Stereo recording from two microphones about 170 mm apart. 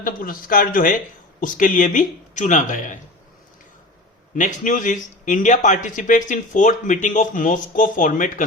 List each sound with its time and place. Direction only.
0.0 s speech: 55° left (ahead or behind)
4.4 s speech: 50° left (ahead or behind)